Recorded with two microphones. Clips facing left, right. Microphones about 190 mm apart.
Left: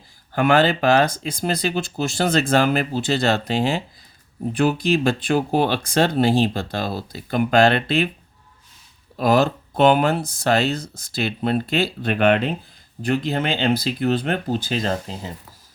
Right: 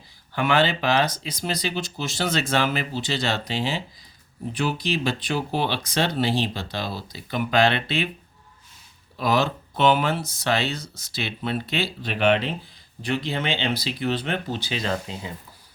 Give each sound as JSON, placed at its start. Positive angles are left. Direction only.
{"t": 0.3, "sound": "speech", "side_deg": 45}
{"t": 9.1, "sound": "speech", "side_deg": 45}